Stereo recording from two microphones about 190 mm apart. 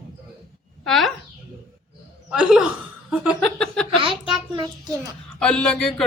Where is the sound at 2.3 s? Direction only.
5° right (ahead or behind).